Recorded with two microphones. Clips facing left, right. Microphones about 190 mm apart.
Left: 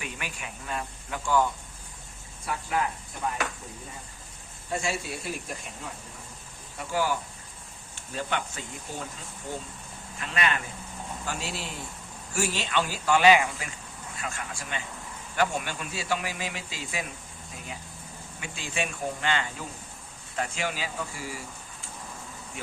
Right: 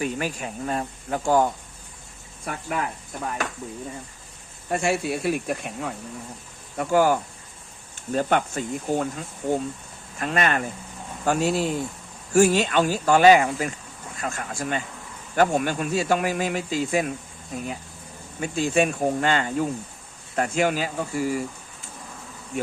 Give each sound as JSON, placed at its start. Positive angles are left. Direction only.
{"t": 0.0, "sound": "speech", "side_deg": -40}
{"t": 2.4, "sound": "speech", "side_deg": -60}
{"t": 4.7, "sound": "speech", "side_deg": -60}
{"t": 6.7, "sound": "speech", "side_deg": -50}
{"t": 18.3, "sound": "speech", "side_deg": -45}